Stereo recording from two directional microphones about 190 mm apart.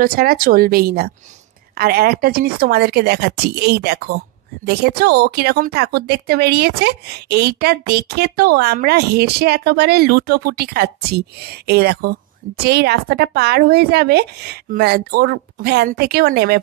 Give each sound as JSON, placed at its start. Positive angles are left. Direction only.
{"t": 0.0, "sound": "a woman's voice", "side_deg": -50}